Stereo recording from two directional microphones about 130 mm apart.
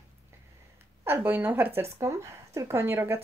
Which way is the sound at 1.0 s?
20° right (ahead or behind).